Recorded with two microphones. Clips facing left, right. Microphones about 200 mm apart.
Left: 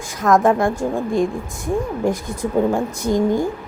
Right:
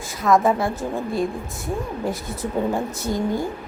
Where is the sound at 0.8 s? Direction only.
15° left (ahead or behind).